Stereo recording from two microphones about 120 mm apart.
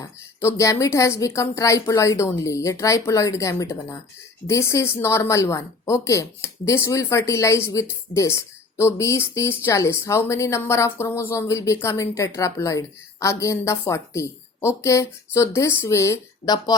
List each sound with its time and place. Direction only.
0.0 s a woman's voice: 25° left (ahead or behind)